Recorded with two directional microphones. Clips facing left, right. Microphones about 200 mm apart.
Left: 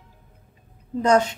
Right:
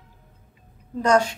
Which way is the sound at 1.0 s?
20° left (ahead or behind).